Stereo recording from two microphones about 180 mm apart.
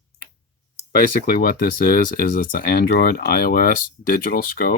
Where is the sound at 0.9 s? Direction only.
50° left (ahead or behind).